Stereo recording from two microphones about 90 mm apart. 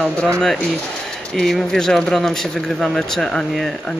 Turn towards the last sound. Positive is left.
turn(degrees=5)  # may be behind; listen again after turning